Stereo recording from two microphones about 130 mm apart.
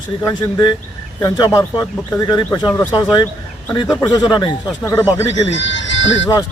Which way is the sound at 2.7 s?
15° left (ahead or behind).